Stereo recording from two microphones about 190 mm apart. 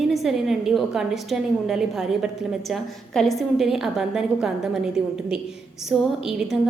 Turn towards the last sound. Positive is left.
turn(degrees=-5)  # may be behind; listen again after turning